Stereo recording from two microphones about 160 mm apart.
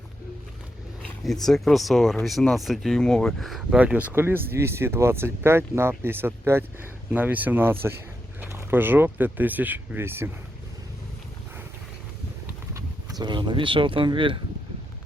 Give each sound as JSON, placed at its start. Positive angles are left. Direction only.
{"t": 1.2, "sound": "speech", "side_deg": 0}
{"t": 12.7, "sound": "speech", "side_deg": -25}